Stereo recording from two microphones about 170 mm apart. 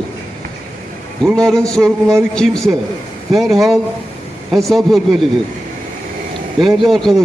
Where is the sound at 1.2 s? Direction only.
5° left (ahead or behind).